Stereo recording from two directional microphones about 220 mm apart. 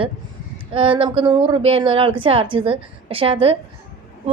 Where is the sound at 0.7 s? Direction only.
25° right (ahead or behind).